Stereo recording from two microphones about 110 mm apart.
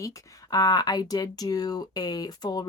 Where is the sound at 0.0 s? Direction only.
30° left (ahead or behind).